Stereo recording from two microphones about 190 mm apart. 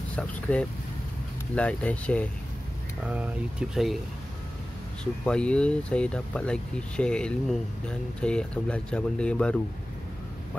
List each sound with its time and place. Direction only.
0.1 s speech: 5° left (ahead or behind)
3.1 s speech: 5° right (ahead or behind)
5.2 s speech: 5° left (ahead or behind)